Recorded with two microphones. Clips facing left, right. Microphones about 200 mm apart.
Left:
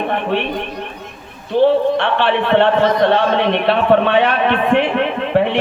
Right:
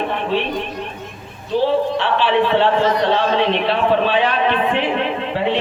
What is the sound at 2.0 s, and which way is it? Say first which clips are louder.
A man's voice: even; 60° left (ahead or behind).